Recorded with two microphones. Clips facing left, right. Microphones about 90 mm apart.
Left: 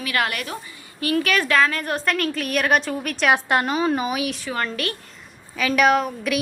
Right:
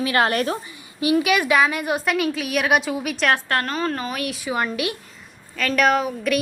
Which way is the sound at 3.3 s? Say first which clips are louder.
Left 2 dB; 15° left (ahead or behind).